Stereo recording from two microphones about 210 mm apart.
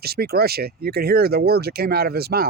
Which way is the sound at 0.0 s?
50° right (ahead or behind).